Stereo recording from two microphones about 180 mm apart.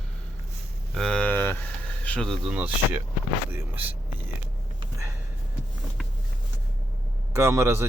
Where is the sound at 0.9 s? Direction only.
5° left (ahead or behind).